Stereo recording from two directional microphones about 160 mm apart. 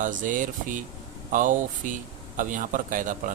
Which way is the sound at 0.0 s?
55° right (ahead or behind).